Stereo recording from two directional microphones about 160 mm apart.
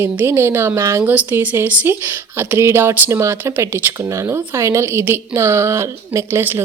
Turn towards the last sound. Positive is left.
turn(degrees=-15)  # may be behind; listen again after turning